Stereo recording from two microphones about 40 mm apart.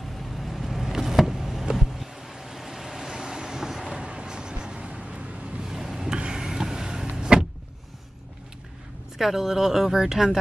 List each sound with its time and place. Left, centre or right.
0.0 s vehicle: centre
4.0 s vehicle: right
5.6 s a sound: centre
6.1 s vehicle: centre
7.2 s power windows: centre
9.2 s speech: centre